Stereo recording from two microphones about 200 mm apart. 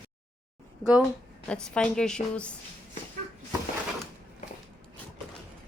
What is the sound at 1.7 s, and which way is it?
Speech, 5° left (ahead or behind).